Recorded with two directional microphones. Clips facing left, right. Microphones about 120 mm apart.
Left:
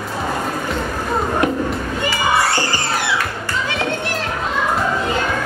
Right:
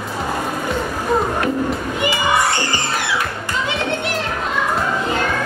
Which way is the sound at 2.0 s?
20° right (ahead or behind).